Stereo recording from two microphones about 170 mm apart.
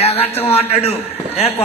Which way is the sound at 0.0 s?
35° left (ahead or behind).